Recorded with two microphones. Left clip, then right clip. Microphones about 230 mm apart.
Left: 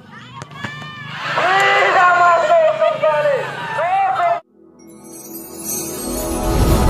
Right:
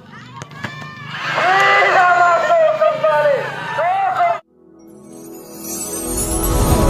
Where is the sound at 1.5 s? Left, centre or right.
Left.